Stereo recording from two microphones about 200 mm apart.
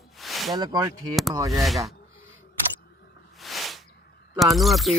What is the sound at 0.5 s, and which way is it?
Speech, 20° right (ahead or behind).